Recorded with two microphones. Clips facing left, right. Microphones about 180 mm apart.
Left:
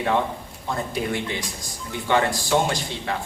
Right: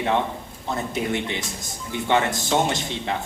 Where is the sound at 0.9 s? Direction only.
20° right (ahead or behind).